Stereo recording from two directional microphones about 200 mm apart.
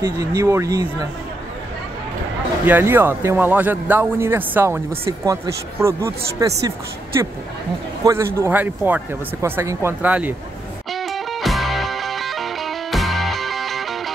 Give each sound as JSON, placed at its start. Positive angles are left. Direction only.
{"t": 0.0, "sound": "speech", "side_deg": -20}
{"t": 2.6, "sound": "speech", "side_deg": -10}
{"t": 8.0, "sound": "speech", "side_deg": -15}
{"t": 10.9, "sound": "music", "side_deg": 0}